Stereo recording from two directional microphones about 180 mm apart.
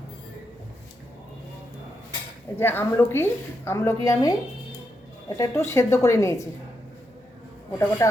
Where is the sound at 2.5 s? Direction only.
10° left (ahead or behind).